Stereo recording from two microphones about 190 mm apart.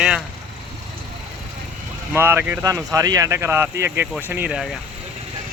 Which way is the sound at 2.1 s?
10° right (ahead or behind).